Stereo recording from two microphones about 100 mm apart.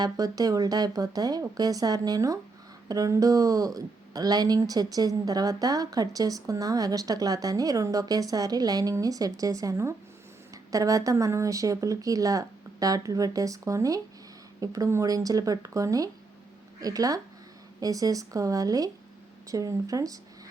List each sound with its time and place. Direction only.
0.0 s speech: 40° right (ahead or behind)